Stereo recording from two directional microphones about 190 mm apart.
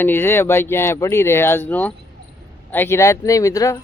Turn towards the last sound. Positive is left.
turn(degrees=15)  # may be behind; listen again after turning